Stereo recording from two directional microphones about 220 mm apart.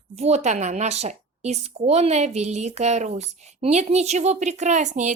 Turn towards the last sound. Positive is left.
turn(degrees=-35)  # may be behind; listen again after turning